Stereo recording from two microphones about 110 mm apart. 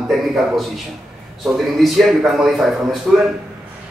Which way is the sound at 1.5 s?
Centre (ahead or behind).